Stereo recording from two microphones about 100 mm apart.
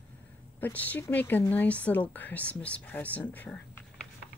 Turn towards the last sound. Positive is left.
turn(degrees=15)  # may be behind; listen again after turning